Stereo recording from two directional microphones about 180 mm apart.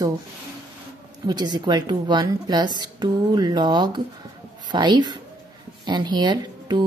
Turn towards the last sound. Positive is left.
turn(degrees=-25)  # may be behind; listen again after turning